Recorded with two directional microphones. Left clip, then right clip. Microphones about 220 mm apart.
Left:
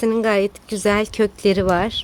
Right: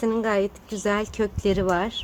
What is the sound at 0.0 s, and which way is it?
Speech, 40° left (ahead or behind).